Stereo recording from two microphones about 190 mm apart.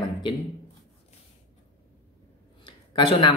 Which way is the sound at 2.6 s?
25° left (ahead or behind).